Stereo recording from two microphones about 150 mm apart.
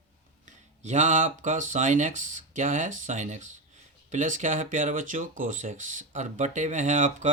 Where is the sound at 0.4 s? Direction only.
50° right (ahead or behind).